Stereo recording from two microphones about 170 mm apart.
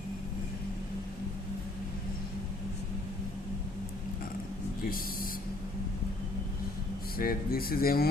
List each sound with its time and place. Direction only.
7.2 s speech: 60° left (ahead or behind)